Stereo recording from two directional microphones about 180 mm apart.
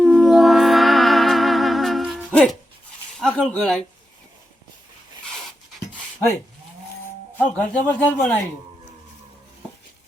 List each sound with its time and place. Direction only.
0.0 s music: centre (ahead or behind)
3.2 s speech: 5° left (ahead or behind)
7.3 s a man's voice: 10° left (ahead or behind)